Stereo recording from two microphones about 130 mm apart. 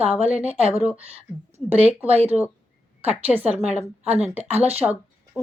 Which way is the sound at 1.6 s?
15° right (ahead or behind).